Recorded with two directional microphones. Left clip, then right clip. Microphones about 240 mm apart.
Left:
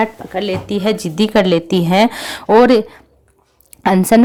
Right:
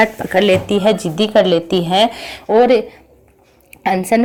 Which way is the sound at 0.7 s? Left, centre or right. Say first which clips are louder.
Right 3 dB; centre.